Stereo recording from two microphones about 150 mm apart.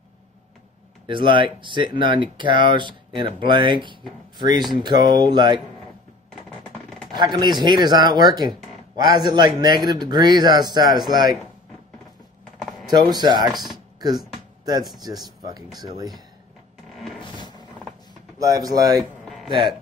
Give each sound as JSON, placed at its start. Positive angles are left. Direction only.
{"t": 1.0, "sound": "speech", "side_deg": -35}
{"t": 7.2, "sound": "speech", "side_deg": -30}
{"t": 12.5, "sound": "typing", "side_deg": 0}
{"t": 13.0, "sound": "speech", "side_deg": -30}
{"t": 16.9, "sound": "music", "side_deg": 5}
{"t": 17.2, "sound": "music", "side_deg": 30}
{"t": 18.4, "sound": "speech", "side_deg": -25}
{"t": 18.9, "sound": "a sound", "side_deg": 0}